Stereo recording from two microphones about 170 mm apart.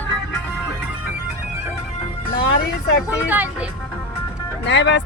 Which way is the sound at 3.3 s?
10° right (ahead or behind).